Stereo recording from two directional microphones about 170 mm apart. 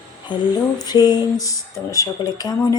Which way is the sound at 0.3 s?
25° left (ahead or behind).